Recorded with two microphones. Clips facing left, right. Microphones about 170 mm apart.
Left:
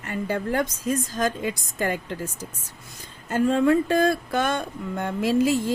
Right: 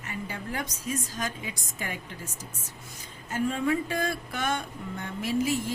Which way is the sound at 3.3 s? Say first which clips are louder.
Left 8 dB; 85° left.